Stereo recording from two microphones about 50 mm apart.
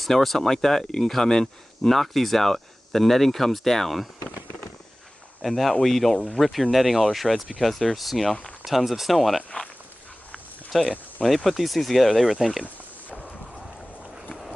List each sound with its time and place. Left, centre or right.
0.0 s speech: centre
5.4 s speech: centre
10.7 s speech: centre
12.6 s a sound: left